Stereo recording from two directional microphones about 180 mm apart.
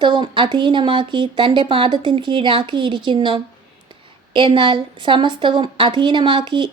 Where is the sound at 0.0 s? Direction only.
25° right (ahead or behind).